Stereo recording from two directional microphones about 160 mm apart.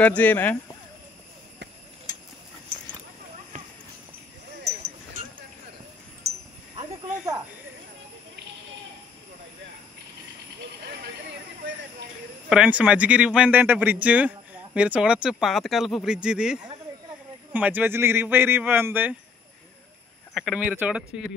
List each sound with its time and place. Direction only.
0.0 s speech: 10° left (ahead or behind)
6.8 s snake: 20° right (ahead or behind)
12.4 s a man's voice: 5° right (ahead or behind)
20.3 s a man's voice: 5° right (ahead or behind)